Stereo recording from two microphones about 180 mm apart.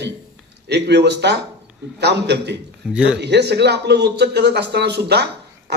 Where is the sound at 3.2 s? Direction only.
70° right (ahead or behind).